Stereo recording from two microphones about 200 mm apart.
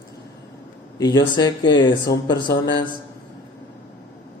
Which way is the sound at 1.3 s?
20° left (ahead or behind).